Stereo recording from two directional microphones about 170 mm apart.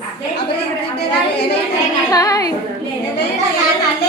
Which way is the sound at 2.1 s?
20° left (ahead or behind).